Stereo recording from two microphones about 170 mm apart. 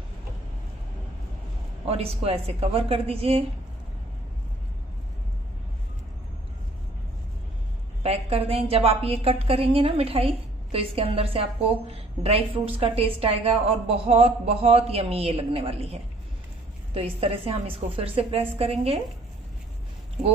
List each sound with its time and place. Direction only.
1.9 s a woman's voice: 35° right (ahead or behind)
8.0 s a woman's voice: 35° right (ahead or behind)